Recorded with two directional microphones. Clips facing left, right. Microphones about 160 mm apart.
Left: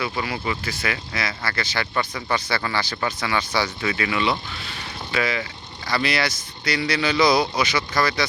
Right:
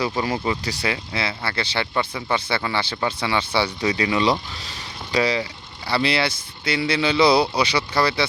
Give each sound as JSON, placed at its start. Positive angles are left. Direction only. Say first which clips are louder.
{"t": 0.0, "sound": "speech", "louder": "right 4 dB", "side_deg": -35}